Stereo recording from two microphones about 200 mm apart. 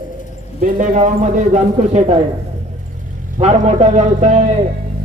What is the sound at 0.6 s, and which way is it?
A man's voice, 40° right (ahead or behind).